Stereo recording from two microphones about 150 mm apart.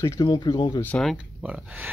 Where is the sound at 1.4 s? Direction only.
10° right (ahead or behind).